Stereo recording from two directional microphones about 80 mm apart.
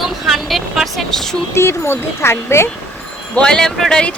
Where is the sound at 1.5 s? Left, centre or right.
Left.